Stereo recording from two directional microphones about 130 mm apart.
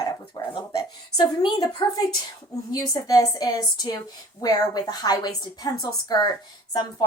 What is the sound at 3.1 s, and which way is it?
A woman's voice, 30° left (ahead or behind).